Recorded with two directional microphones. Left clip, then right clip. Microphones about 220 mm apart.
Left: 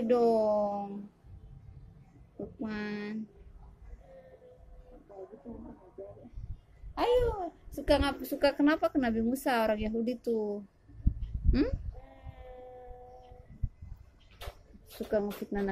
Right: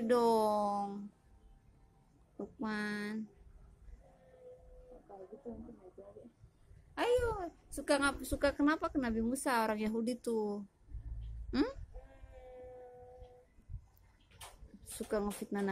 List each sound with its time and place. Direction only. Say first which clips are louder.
0.0 s a sound: left 4 dB; 25° right (ahead or behind)
2.6 s a woman's voice: even; 25° right (ahead or behind)
7.0 s a woman's voice: left 5 dB; 25° right (ahead or behind)
15.0 s a woman's voice: left 5 dB; 20° right (ahead or behind)